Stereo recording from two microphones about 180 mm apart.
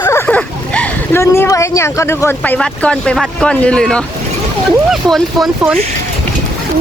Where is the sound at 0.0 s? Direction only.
15° left (ahead or behind).